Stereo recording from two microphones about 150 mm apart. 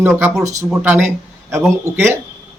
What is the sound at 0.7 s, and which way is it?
Speech, 10° right (ahead or behind).